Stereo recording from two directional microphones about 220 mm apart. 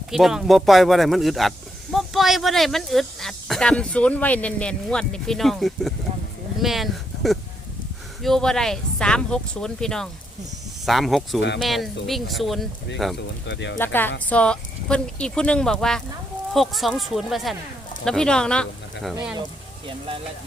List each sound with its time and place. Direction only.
0.1 s speech: centre (ahead or behind)
13.5 s speech: 55° left (ahead or behind)
13.7 s speech: 10° left (ahead or behind)